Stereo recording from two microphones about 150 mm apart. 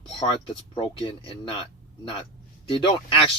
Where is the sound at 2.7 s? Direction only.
35° left (ahead or behind).